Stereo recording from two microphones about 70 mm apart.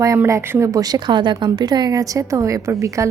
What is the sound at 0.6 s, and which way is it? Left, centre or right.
A woman's voice, right.